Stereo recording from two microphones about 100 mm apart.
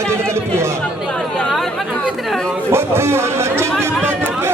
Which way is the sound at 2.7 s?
25° right (ahead or behind).